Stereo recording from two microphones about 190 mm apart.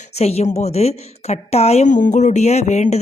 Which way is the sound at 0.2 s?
35° left (ahead or behind).